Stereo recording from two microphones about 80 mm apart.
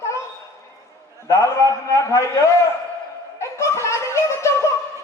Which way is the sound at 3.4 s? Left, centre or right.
Left.